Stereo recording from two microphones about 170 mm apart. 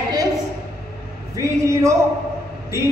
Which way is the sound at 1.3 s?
20° right (ahead or behind).